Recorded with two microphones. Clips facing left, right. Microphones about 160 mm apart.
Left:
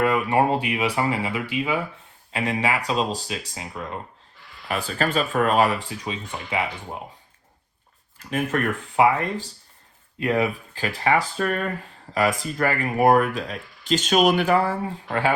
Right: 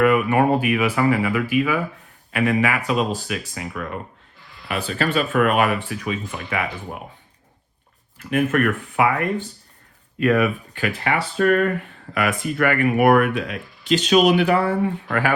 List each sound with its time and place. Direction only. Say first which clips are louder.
0.0 s speech: right 3 dB; 25° left (ahead or behind)
4.7 s speech: right 2 dB; 40° left (ahead or behind); by 7.0 s 20° left (ahead or behind)
8.3 s speech: right 5 dB; 35° left (ahead or behind)
10.2 s speech: right 4 dB; 25° left (ahead or behind)
11.3 s speech: right 7 dB; 50° right (ahead or behind)
11.8 s speech: left 1 dB; 30° left (ahead or behind)
14.8 s speech: right 2 dB; 25° left (ahead or behind)